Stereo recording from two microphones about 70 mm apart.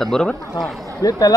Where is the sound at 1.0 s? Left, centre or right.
Left.